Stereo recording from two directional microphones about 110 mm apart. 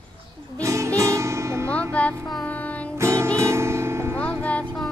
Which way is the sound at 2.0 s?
10° left (ahead or behind).